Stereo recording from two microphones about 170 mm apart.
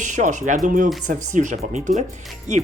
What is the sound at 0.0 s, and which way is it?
Speech, 45° right (ahead or behind).